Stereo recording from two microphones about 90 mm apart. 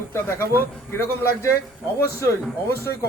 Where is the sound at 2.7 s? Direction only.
30° left (ahead or behind).